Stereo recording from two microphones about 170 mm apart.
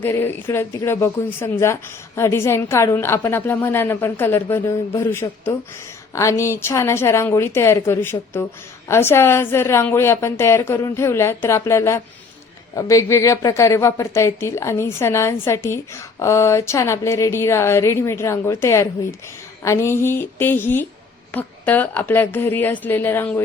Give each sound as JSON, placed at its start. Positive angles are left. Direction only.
{"t": 0.0, "sound": "a woman's voice", "side_deg": 15}